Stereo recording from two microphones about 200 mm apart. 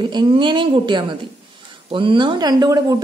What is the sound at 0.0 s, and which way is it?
A woman's voice, 25° right (ahead or behind).